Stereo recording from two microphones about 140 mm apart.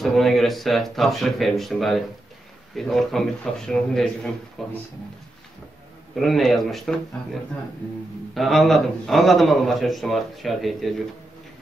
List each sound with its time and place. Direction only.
0.0 s speech: centre (ahead or behind)
6.1 s speech: centre (ahead or behind)
8.4 s speech: centre (ahead or behind)